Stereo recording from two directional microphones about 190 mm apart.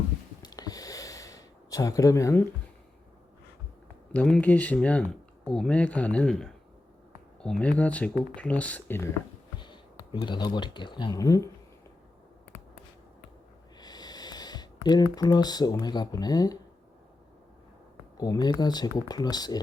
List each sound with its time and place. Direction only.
0.4 s a sound: 20° left (ahead or behind)
4.1 s speech: 5° left (ahead or behind)
9.6 s speech: 25° left (ahead or behind)
13.7 s speech: 20° left (ahead or behind)
18.2 s speech: 20° left (ahead or behind)